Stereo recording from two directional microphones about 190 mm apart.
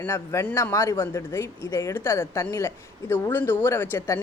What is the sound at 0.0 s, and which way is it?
Speech, 15° left (ahead or behind).